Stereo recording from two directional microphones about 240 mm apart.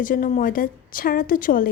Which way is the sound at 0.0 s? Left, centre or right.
Left.